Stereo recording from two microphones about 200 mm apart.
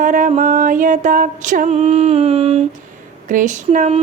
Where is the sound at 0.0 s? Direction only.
40° right (ahead or behind).